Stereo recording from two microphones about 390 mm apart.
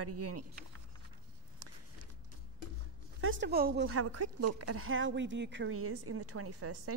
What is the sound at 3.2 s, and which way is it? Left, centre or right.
A woman's voice, right.